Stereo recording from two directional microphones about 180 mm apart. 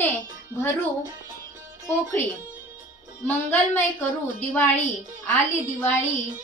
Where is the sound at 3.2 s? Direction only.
10° left (ahead or behind).